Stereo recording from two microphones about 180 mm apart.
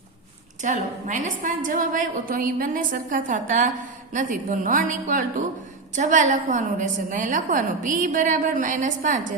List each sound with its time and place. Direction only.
0.6 s a woman's voice: 45° right (ahead or behind)